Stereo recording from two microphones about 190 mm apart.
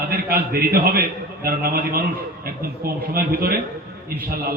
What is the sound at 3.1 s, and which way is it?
Speech, 55° right (ahead or behind).